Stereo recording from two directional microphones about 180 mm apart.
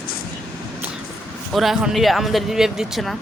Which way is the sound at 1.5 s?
Centre (ahead or behind).